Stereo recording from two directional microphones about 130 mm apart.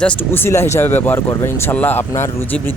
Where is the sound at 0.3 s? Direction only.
20° left (ahead or behind).